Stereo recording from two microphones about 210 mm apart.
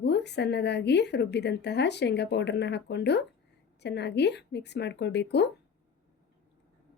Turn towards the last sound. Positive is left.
turn(degrees=55)  # may be behind; listen again after turning